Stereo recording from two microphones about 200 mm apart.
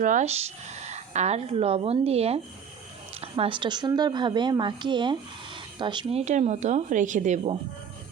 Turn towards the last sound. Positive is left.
turn(degrees=-35)  # may be behind; listen again after turning